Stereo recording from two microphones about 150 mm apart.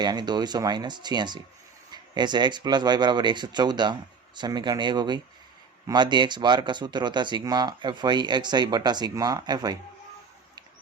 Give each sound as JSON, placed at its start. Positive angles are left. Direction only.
{"t": 0.0, "sound": "speech", "side_deg": -30}